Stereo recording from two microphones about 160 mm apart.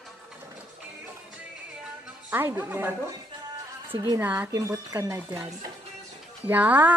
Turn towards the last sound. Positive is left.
turn(degrees=-10)  # may be behind; listen again after turning